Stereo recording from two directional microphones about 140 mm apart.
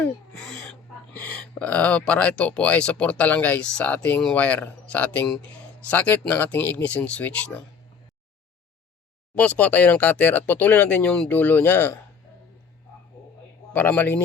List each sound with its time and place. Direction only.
0.0 s a sound: 5° left (ahead or behind)
1.4 s speech: 10° left (ahead or behind)
9.3 s speech: 10° left (ahead or behind)
13.7 s speech: 15° left (ahead or behind)